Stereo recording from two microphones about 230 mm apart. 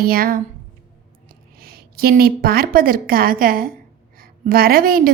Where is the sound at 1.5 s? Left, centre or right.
Right.